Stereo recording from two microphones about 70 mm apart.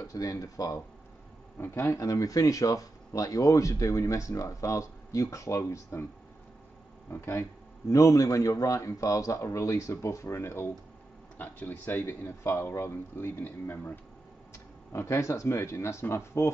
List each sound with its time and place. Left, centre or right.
0.0 s speech: left
1.6 s speech: left
7.1 s a man's voice: left
7.9 s speech: left
11.3 s a man's voice: left